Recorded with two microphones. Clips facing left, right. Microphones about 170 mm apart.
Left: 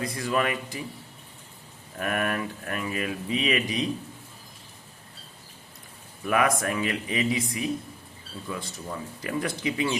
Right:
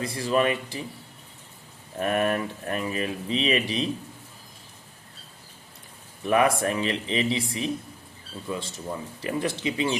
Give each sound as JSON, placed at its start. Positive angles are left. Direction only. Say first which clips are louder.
{"t": 0.0, "sound": "speech", "louder": "right 3 dB", "side_deg": -30}
{"t": 2.0, "sound": "speech", "louder": "right 4 dB", "side_deg": -30}
{"t": 6.2, "sound": "speech", "louder": "right 3 dB", "side_deg": -30}